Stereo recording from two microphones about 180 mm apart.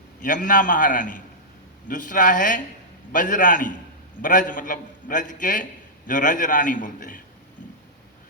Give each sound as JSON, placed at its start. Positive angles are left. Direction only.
{"t": 0.2, "sound": "a man's voice", "side_deg": 50}